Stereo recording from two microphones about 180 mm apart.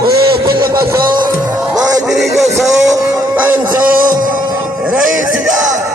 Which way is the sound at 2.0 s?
Centre (ahead or behind).